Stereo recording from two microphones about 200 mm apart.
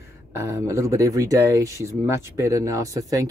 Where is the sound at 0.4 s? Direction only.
15° right (ahead or behind).